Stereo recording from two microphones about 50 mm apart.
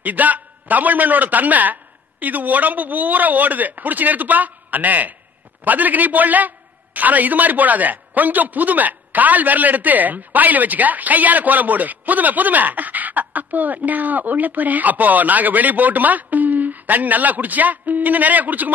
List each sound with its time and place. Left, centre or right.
0.0 s a man's voice: right